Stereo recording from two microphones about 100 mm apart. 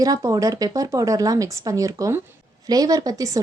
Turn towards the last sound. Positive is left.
turn(degrees=-35)  # may be behind; listen again after turning